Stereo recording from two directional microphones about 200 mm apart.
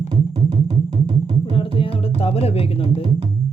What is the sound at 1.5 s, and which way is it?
Music, 30° left (ahead or behind).